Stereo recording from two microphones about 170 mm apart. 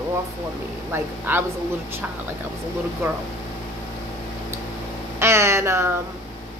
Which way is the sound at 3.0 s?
15° right (ahead or behind).